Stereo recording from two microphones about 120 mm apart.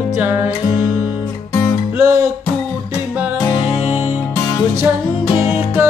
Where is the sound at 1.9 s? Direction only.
25° right (ahead or behind).